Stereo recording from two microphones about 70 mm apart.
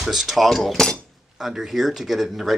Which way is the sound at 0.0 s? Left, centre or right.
Centre.